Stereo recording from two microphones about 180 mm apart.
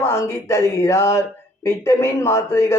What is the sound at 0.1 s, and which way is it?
A woman's voice, 15° left (ahead or behind).